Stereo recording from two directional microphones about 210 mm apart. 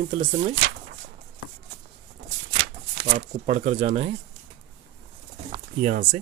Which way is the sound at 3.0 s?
35° right (ahead or behind).